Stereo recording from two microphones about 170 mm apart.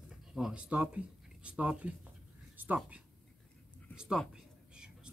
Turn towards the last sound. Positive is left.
turn(degrees=-5)  # may be behind; listen again after turning